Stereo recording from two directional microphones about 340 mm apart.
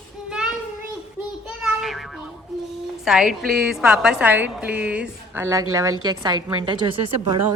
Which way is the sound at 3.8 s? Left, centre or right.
Centre.